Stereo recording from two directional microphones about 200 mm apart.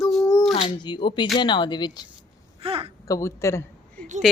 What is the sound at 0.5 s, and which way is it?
Speech, 25° left (ahead or behind).